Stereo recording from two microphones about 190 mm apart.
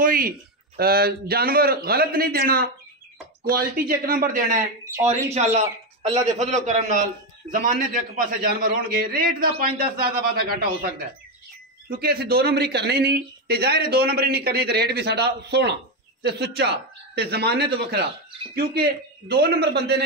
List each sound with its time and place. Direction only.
0.0 s a man's voice: 50° right (ahead or behind)
5.0 s a man's voice: 35° right (ahead or behind)
11.9 s a man's voice: 55° right (ahead or behind)